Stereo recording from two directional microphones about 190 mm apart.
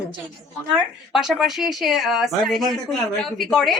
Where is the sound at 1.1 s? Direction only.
Centre (ahead or behind).